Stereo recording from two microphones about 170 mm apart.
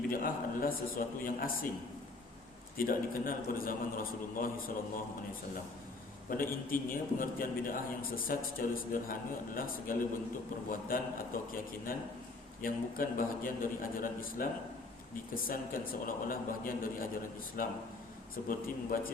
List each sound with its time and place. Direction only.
0.1 s a man's voice: 55° left (ahead or behind)
2.7 s a man's voice: 55° left (ahead or behind)
6.3 s a man's voice: 55° left (ahead or behind)
15.4 s a man's voice: 60° left (ahead or behind)